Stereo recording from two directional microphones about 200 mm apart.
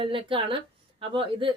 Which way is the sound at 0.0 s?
25° right (ahead or behind).